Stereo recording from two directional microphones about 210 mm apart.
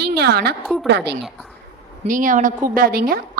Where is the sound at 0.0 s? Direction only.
50° right (ahead or behind).